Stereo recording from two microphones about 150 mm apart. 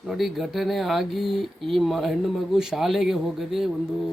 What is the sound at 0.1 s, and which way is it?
Speech, centre (ahead or behind).